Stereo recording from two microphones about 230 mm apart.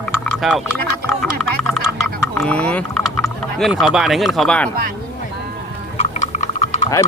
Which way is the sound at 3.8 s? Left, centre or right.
Centre.